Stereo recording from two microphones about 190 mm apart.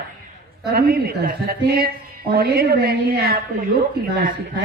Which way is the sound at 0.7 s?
55° right (ahead or behind).